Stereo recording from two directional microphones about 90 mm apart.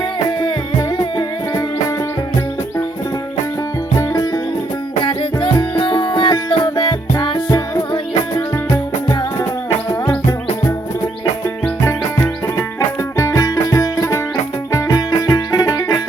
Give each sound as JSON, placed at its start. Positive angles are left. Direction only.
{"t": 0.8, "sound": "music", "side_deg": 50}
{"t": 3.9, "sound": "music", "side_deg": 40}
{"t": 5.0, "sound": "music", "side_deg": 70}
{"t": 10.2, "sound": "music", "side_deg": 30}